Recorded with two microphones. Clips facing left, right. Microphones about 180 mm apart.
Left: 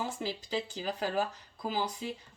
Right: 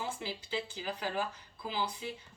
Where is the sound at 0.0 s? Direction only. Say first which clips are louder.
Left 3 dB; 40° left (ahead or behind).